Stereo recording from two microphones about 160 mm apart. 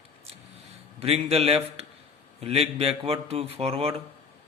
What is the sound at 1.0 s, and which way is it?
A man's voice, 40° right (ahead or behind).